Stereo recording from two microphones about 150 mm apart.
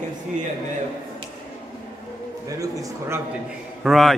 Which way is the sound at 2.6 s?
20° right (ahead or behind).